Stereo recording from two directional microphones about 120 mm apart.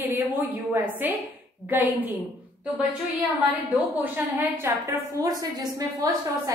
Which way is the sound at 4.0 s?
20° right (ahead or behind).